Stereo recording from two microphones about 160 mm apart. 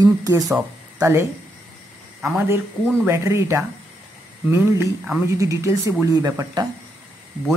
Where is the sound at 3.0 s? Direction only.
15° right (ahead or behind).